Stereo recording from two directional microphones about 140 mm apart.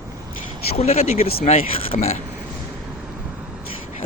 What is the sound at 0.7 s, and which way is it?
Speech, 50° left (ahead or behind).